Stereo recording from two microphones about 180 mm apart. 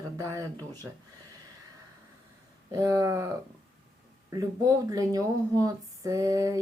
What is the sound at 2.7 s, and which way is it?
Speech, 15° right (ahead or behind).